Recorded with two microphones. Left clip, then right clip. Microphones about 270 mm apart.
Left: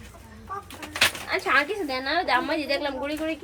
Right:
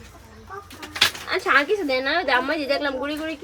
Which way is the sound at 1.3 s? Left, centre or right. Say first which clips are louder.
Right 4 dB; right.